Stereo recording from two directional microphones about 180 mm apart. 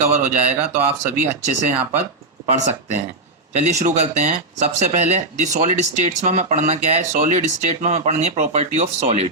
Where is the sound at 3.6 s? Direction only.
40° right (ahead or behind).